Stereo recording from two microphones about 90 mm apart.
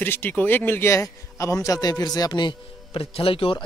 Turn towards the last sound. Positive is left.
turn(degrees=90)